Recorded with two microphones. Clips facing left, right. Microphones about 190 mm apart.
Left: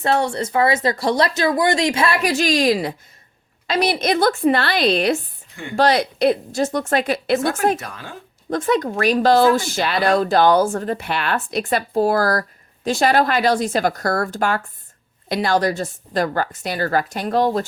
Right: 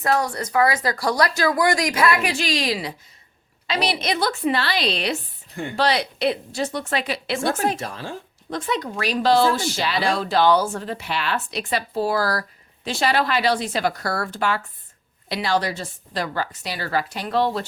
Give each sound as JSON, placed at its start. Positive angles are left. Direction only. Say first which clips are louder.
{"t": 0.0, "sound": "speech", "louder": "left 3 dB", "side_deg": 30}
{"t": 2.2, "sound": "speech", "louder": "left 7 dB", "side_deg": 45}
{"t": 7.8, "sound": "speech", "louder": "right 3 dB", "side_deg": -30}
{"t": 8.4, "sound": "speech", "louder": "left 7 dB", "side_deg": 50}